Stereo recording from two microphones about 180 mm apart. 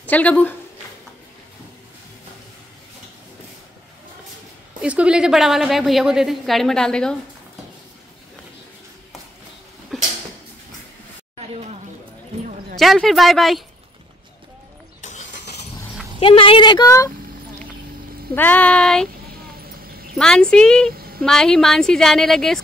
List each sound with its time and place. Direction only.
0.1 s speech: 10° left (ahead or behind)
4.8 s a woman's voice: 5° right (ahead or behind)
9.9 s a sound: centre (ahead or behind)
11.3 s a sound: 35° right (ahead or behind)
12.7 s a woman's voice: centre (ahead or behind)
15.0 s vehicle: 40° left (ahead or behind)
16.2 s speech: 30° left (ahead or behind)
18.3 s speech: 10° left (ahead or behind)
19.6 s a sound: 55° right (ahead or behind)
20.2 s a woman's voice: 5° left (ahead or behind)
20.9 s a sound: 55° right (ahead or behind)
21.2 s a woman's voice: 5° left (ahead or behind)